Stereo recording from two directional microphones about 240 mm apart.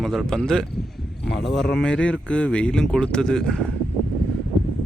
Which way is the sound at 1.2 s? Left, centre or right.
Left.